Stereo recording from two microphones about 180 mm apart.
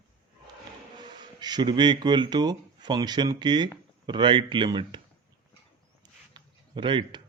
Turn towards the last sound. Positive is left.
turn(degrees=-25)  # may be behind; listen again after turning